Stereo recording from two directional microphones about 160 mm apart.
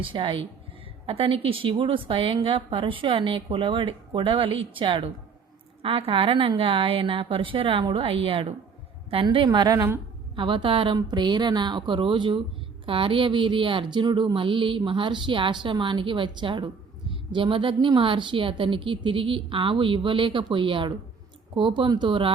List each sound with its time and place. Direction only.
0.0 s a woman's voice: 30° right (ahead or behind)
10.3 s speech: 30° right (ahead or behind)